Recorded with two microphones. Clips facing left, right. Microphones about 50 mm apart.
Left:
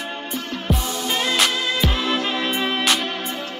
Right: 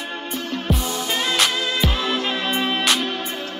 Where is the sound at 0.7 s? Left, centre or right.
Centre.